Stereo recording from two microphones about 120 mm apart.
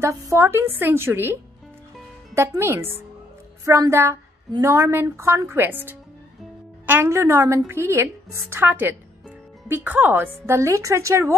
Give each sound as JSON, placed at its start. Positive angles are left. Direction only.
{"t": 0.0, "sound": "a woman's voice", "side_deg": -25}